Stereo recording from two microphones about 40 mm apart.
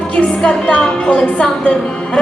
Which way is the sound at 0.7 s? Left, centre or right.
Left.